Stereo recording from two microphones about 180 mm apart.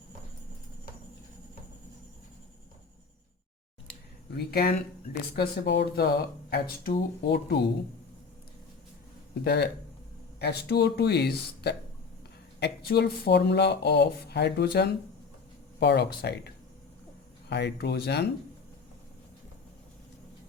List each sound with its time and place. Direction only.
4.4 s speech: 60° left (ahead or behind)
9.4 s speech: 65° left (ahead or behind)
17.5 s speech: 70° left (ahead or behind)